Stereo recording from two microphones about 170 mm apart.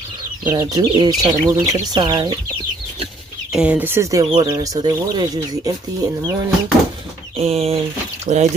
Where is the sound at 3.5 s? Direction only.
10° right (ahead or behind); by 6.4 s 25° right (ahead or behind).